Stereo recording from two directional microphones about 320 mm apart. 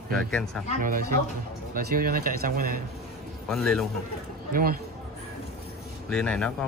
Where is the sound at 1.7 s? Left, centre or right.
Right.